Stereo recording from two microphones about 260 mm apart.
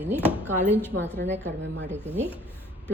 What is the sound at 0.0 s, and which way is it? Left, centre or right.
Speech, centre.